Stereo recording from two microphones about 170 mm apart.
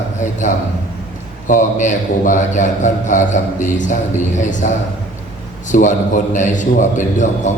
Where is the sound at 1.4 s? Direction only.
50° left (ahead or behind).